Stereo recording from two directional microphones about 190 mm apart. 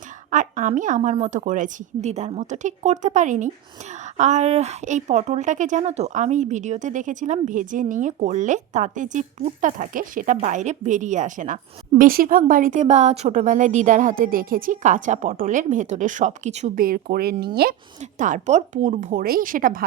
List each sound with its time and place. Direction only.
0.3 s a woman's voice: 40° right (ahead or behind); by 17.7 s 55° right (ahead or behind)
18.0 s speech: 40° right (ahead or behind)